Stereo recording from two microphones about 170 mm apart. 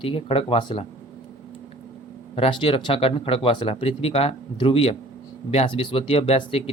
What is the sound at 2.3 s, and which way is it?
Speech, 30° left (ahead or behind).